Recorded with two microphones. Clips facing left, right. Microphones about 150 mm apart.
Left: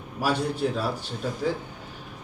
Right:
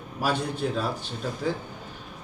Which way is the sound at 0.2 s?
10° left (ahead or behind).